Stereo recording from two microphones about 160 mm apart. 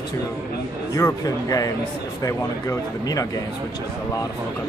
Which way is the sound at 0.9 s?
20° left (ahead or behind).